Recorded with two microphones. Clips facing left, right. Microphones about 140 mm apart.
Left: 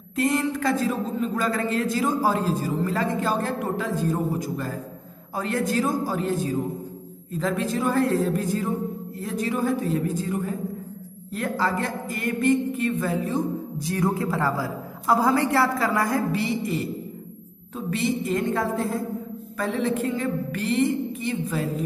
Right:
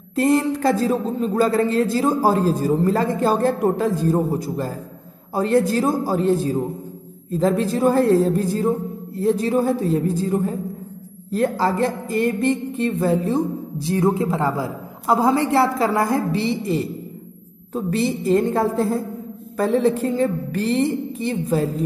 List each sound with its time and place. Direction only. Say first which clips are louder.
0.1 s a man's voice: right 6 dB; 35° right (ahead or behind)